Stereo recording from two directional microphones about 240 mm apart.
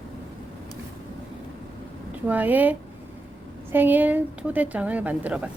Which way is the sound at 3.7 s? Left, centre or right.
Centre.